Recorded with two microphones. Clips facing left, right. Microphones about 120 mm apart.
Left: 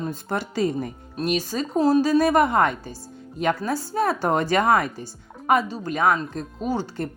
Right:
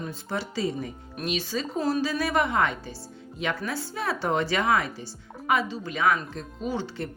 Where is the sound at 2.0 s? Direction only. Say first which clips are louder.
Left 7 dB; 45° left (ahead or behind).